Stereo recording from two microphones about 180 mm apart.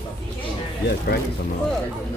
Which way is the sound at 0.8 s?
60° left (ahead or behind).